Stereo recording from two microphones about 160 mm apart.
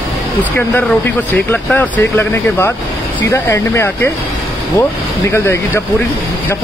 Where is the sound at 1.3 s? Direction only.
10° left (ahead or behind).